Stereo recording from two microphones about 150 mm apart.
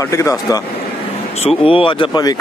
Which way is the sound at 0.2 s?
20° left (ahead or behind).